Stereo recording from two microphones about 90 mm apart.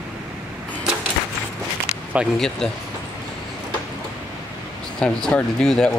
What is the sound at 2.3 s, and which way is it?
Speech, 5° left (ahead or behind).